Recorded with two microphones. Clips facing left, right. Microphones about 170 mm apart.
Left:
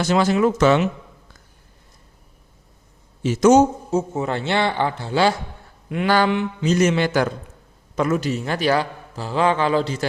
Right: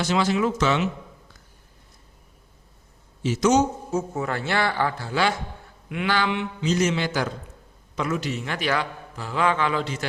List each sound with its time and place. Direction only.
0.0 s a man's voice: 45° left (ahead or behind)
3.2 s a man's voice: 50° left (ahead or behind)
3.9 s speech: 25° left (ahead or behind)
5.9 s a man's voice: 40° left (ahead or behind); by 7.3 s 55° left (ahead or behind)
7.9 s a man's voice: 45° left (ahead or behind)